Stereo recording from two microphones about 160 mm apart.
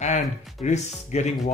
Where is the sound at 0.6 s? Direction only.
45° left (ahead or behind).